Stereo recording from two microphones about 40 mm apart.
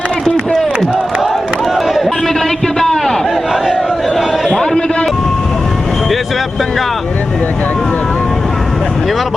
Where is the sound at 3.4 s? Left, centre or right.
Centre.